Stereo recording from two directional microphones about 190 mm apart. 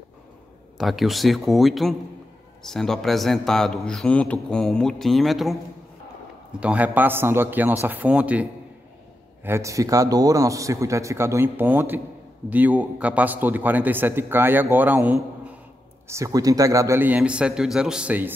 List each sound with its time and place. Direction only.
0.7 s speech: centre (ahead or behind)
6.6 s a man's voice: 5° right (ahead or behind)